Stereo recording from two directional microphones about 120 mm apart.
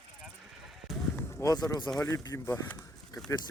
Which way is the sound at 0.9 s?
Centre (ahead or behind).